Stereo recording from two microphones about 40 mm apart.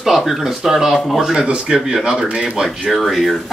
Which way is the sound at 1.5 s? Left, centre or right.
Right.